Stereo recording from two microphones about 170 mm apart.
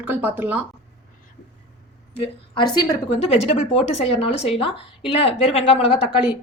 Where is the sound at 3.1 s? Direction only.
40° left (ahead or behind).